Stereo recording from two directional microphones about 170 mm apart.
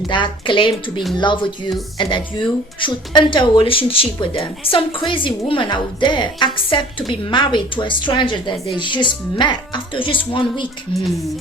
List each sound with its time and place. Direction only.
0.1 s speech: 30° left (ahead or behind)